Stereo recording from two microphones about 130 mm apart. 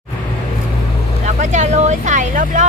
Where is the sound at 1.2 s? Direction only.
65° right (ahead or behind).